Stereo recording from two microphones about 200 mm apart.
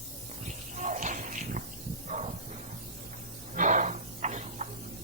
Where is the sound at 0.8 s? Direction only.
35° right (ahead or behind).